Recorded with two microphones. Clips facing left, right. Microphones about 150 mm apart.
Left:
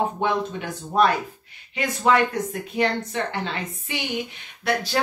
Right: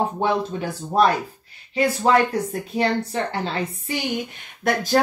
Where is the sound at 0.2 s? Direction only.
35° right (ahead or behind).